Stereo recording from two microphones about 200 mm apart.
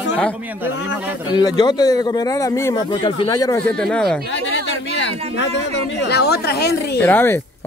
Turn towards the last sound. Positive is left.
turn(degrees=10)  # may be behind; listen again after turning